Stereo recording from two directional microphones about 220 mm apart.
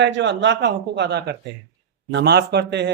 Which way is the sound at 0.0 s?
55° right (ahead or behind).